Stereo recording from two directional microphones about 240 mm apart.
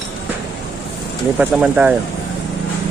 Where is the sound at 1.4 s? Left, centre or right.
Centre.